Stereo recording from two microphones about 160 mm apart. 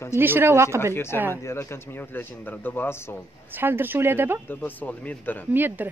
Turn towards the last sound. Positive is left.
turn(degrees=-10)  # may be behind; listen again after turning